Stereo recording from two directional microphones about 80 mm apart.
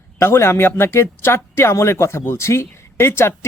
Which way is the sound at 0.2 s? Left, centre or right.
Left.